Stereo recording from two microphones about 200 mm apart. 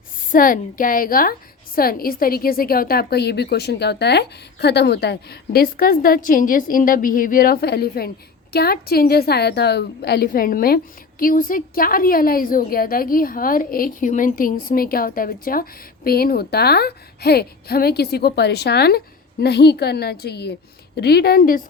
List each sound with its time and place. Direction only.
0.3 s a woman's voice: 45° left (ahead or behind)